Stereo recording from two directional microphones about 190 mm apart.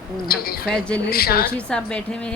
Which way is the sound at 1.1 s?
50° left (ahead or behind).